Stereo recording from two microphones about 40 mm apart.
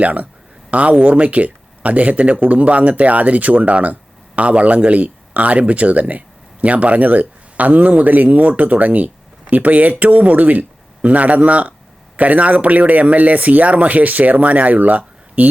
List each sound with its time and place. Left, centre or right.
0.0 s a man's voice: right